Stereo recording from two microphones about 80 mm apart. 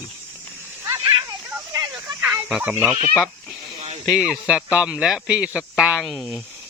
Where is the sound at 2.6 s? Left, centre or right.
Centre.